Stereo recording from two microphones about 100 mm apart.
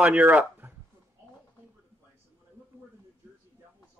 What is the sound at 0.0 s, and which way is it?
Speech, 15° right (ahead or behind).